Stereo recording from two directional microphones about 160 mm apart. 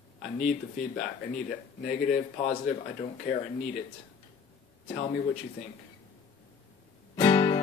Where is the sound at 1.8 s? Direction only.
55° left (ahead or behind).